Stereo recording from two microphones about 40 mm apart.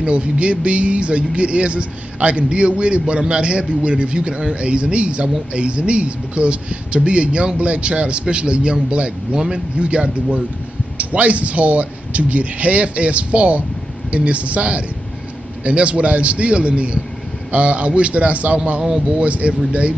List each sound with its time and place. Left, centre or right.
0.0 s a man's voice: right